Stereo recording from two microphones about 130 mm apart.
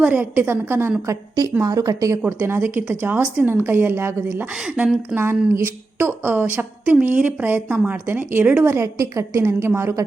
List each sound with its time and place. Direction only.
0.0 s a woman's voice: 10° right (ahead or behind)
2.2 s speech: 15° right (ahead or behind)
4.5 s speech: 5° right (ahead or behind)